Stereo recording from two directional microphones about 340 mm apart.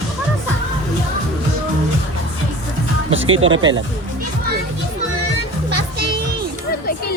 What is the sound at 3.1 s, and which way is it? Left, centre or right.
Music, right.